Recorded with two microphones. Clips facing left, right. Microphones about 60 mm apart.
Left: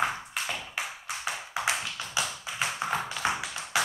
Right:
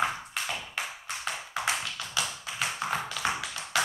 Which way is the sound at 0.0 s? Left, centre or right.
Centre.